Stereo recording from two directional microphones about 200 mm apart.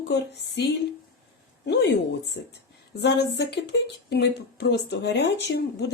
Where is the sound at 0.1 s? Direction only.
60° left (ahead or behind).